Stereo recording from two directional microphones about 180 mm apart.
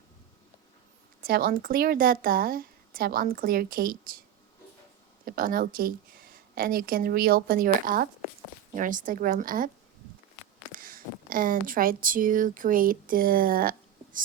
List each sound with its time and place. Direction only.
1.2 s a woman's voice: 55° right (ahead or behind)
5.2 s a woman's voice: 50° right (ahead or behind)
10.7 s speech: 50° right (ahead or behind)